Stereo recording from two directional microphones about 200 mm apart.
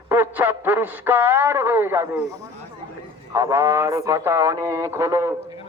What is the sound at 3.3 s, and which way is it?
Speech, 15° right (ahead or behind).